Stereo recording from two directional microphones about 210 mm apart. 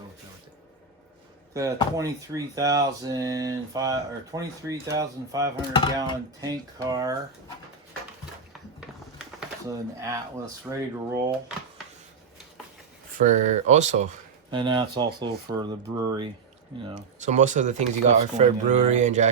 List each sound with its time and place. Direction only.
1.5 s speech: 15° right (ahead or behind)
9.6 s speech: 15° right (ahead or behind)
13.1 s speech: 35° right (ahead or behind)
14.5 s speech: 20° right (ahead or behind)
16.9 s speech: 35° right (ahead or behind)